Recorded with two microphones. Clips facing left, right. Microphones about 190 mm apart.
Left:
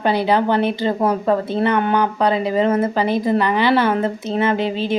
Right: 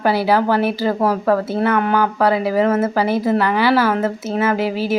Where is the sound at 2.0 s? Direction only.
20° left (ahead or behind).